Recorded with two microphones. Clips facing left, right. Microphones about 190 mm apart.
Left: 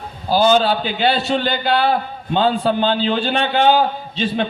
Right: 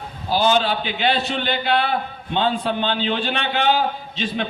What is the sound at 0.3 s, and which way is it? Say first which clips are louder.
A man's voice: left 4 dB; 40° left (ahead or behind).